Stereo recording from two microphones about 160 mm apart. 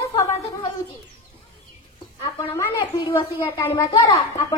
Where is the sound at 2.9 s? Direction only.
30° left (ahead or behind).